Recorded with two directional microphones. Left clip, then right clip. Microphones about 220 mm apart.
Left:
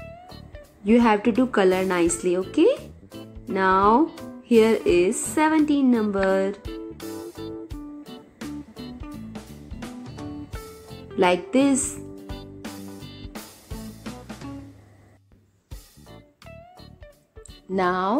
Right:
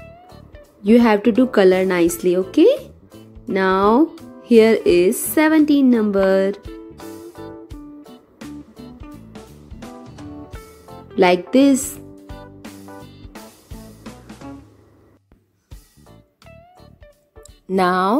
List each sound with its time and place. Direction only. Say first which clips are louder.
0.0 s music: even; centre (ahead or behind)
0.8 s speech: right 5 dB; 25° right (ahead or behind)
2.5 s music: right 6 dB; 25° right (ahead or behind)
3.1 s music: right 3 dB; centre (ahead or behind)
3.5 s speech: right 2 dB; 25° right (ahead or behind)
4.1 s music: right 1 dB; centre (ahead or behind)
4.5 s speech: right 6 dB; 25° right (ahead or behind)
6.6 s music: even; centre (ahead or behind)
11.1 s speech: right 6 dB; 25° right (ahead or behind)
12.3 s music: even; centre (ahead or behind)
16.1 s music: left 1 dB; centre (ahead or behind)
17.6 s speech: right 6 dB; 30° right (ahead or behind)